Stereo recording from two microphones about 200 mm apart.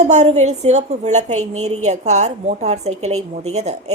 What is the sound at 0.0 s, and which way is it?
A woman's voice, 35° right (ahead or behind).